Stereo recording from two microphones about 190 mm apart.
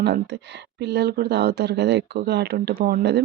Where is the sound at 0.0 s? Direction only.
65° right (ahead or behind).